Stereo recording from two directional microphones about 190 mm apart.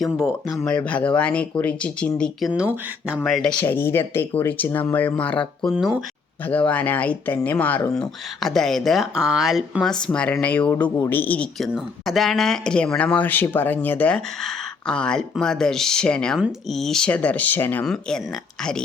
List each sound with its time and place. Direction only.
0.0 s speech: centre (ahead or behind)
2.5 s speech: 5° right (ahead or behind)
5.7 s speech: 5° right (ahead or behind)
6.5 s speech: 5° left (ahead or behind)